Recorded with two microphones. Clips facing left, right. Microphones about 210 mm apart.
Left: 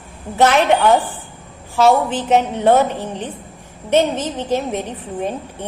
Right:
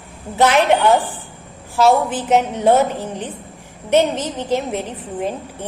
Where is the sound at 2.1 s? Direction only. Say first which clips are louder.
Left 1 dB; 15° right (ahead or behind).